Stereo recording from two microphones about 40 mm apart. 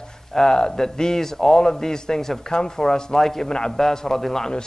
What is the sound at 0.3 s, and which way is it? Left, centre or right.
Speech, centre.